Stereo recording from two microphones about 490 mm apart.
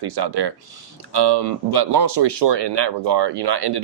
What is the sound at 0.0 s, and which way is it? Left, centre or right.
Speech, right.